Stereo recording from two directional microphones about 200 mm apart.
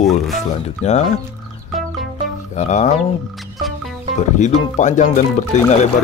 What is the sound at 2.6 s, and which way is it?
Speech, 35° left (ahead or behind).